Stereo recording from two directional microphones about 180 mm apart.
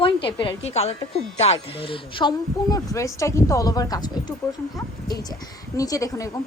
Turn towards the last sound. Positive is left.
turn(degrees=20)  # may be behind; listen again after turning